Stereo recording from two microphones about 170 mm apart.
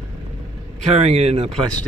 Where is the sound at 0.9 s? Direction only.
40° right (ahead or behind).